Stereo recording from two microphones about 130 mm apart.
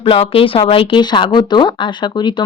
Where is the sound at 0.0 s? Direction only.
45° left (ahead or behind).